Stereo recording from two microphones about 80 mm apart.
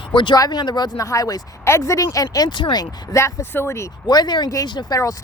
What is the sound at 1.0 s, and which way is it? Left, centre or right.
Speech, left.